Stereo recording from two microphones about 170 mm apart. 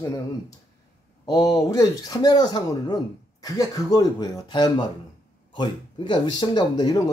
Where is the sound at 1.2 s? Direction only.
20° left (ahead or behind).